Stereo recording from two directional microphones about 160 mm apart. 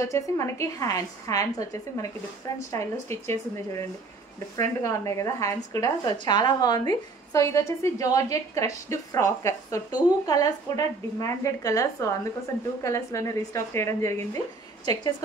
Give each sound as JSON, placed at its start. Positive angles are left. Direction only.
{"t": 0.0, "sound": "a woman's voice", "side_deg": 20}